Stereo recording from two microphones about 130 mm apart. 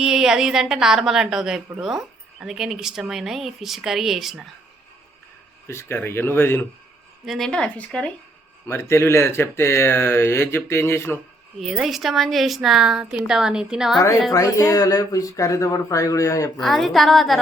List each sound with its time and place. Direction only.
0.0 s a woman's voice: 5° right (ahead or behind)
5.6 s speech: 20° left (ahead or behind)
7.3 s a woman's voice: 5° left (ahead or behind)
8.6 s speech: 20° left (ahead or behind)
11.6 s a woman's voice: centre (ahead or behind)
14.3 s speech: 25° left (ahead or behind)
16.6 s a woman's voice: centre (ahead or behind)